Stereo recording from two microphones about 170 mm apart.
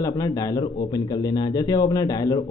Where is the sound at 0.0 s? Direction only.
20° left (ahead or behind).